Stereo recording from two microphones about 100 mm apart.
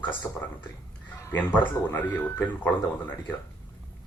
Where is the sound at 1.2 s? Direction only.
20° left (ahead or behind).